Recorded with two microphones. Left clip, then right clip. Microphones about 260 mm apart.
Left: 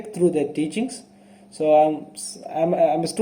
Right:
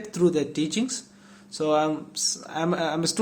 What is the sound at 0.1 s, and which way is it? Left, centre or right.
A man's voice, right.